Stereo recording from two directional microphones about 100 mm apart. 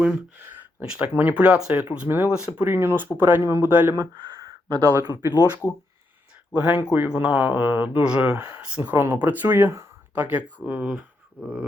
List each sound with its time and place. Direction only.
0.0 s a sound: 20° right (ahead or behind)
0.9 s speech: 15° right (ahead or behind)
2.5 s speech: 20° right (ahead or behind)
4.2 s a sound: 45° right (ahead or behind)
5.0 s speech: 40° right (ahead or behind)
5.7 s speech: 25° left (ahead or behind)
6.5 s speech: 15° right (ahead or behind)